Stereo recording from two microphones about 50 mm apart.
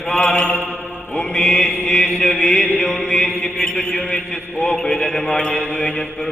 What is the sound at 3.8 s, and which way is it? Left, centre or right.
Chant, centre.